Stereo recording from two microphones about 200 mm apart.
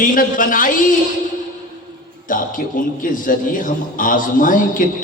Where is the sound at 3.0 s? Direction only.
40° left (ahead or behind).